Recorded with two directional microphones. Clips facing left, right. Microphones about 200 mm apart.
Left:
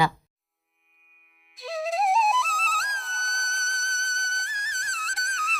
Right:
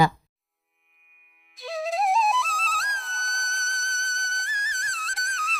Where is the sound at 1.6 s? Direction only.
Centre (ahead or behind).